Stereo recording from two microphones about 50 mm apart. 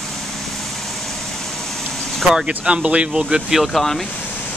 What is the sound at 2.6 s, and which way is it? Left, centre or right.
Speech, right.